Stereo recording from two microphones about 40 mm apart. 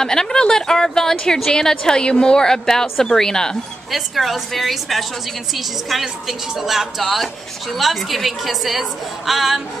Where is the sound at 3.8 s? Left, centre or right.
Centre.